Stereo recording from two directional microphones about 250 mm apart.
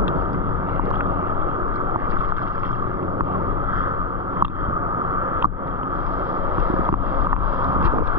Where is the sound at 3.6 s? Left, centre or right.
Centre.